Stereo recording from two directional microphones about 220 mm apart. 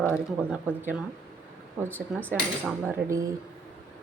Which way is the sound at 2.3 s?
5° right (ahead or behind).